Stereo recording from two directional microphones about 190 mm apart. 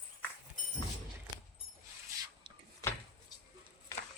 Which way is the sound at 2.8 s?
15° left (ahead or behind).